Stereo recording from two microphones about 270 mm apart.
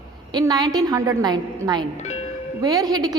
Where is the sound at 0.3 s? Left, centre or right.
Centre.